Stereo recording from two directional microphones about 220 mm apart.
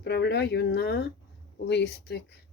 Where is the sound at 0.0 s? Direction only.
50° left (ahead or behind).